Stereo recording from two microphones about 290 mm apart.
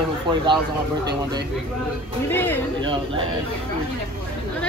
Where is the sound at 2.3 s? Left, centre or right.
Centre.